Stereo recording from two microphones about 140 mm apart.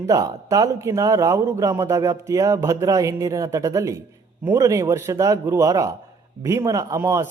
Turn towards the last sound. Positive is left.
turn(degrees=-20)  # may be behind; listen again after turning